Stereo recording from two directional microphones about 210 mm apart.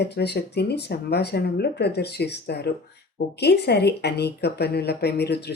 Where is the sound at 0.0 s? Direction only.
50° left (ahead or behind).